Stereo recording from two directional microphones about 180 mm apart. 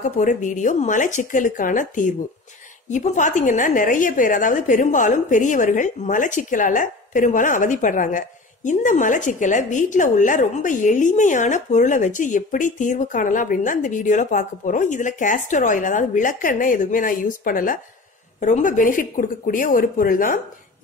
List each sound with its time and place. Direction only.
0.0 s a woman's voice: 45° left (ahead or behind)